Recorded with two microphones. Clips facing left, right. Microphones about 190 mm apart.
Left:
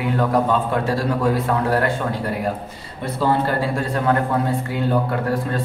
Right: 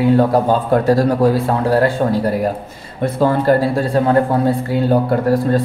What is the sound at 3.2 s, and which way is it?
Speech, 45° right (ahead or behind).